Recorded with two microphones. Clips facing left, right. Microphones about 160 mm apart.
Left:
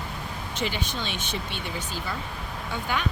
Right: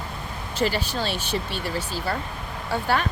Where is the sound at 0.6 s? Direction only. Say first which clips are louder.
Right 6 dB; 35° right (ahead or behind).